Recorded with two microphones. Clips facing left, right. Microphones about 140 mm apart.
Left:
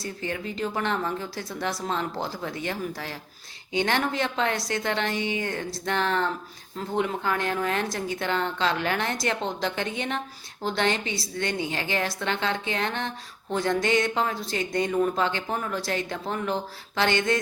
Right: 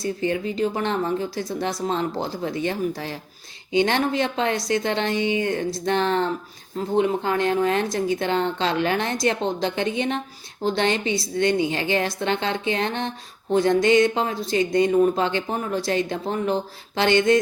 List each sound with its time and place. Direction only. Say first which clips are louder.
0.0 s a woman's voice: right 8 dB; 20° right (ahead or behind)